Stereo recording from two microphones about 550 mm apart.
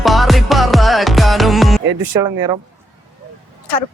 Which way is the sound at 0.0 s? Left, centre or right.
Centre.